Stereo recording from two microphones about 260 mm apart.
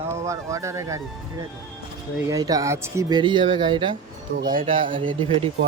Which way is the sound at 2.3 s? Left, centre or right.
Centre.